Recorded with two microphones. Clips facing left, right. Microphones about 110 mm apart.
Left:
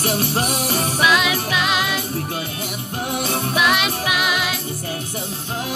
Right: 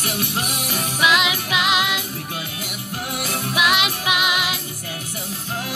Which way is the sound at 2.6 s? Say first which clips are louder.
Left 3 dB; 30° left (ahead or behind).